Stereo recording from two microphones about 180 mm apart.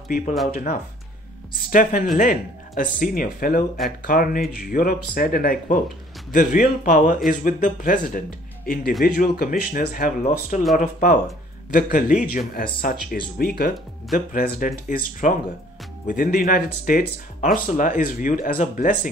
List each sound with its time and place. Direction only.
1.7 s speech: 45° left (ahead or behind)